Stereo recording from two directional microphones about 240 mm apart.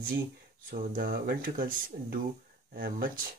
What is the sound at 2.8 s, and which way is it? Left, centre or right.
Speech, right.